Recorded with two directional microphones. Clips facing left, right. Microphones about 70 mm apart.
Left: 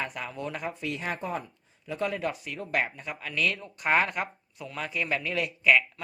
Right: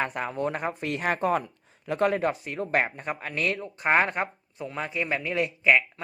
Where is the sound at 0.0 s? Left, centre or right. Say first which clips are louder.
Right 6 dB; right.